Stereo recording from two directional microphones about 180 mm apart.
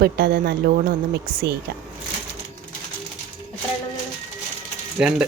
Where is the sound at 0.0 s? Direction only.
60° right (ahead or behind).